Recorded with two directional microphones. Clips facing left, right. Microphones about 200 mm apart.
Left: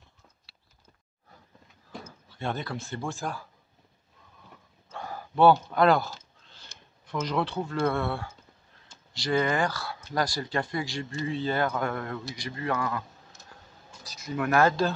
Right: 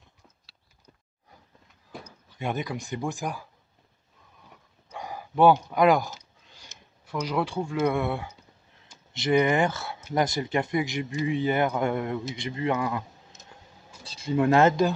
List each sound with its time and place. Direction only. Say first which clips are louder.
1.9 s speech: even; 15° right (ahead or behind)
4.8 s a sound: right 1 dB; 15° right (ahead or behind)
7.2 s speech: right 1 dB; 10° right (ahead or behind)